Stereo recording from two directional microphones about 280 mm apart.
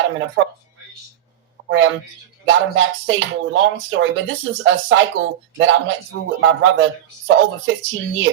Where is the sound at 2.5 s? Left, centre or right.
Right.